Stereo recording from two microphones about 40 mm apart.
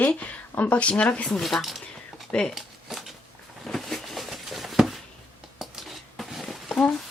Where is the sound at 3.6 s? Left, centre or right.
Centre.